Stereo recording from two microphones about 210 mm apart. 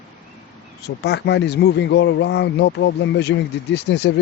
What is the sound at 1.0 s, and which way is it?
Speech, 50° left (ahead or behind).